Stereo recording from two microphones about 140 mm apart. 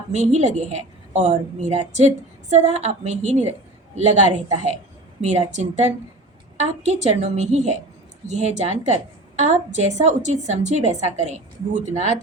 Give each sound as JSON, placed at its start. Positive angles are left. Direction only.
{"t": 0.1, "sound": "a woman's voice", "side_deg": -55}